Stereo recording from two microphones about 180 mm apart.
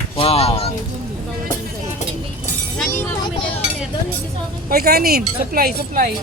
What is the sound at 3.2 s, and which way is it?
Speech, 25° left (ahead or behind).